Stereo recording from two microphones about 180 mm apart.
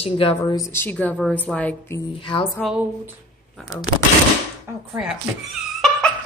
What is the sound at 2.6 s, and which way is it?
Speech, 5° right (ahead or behind).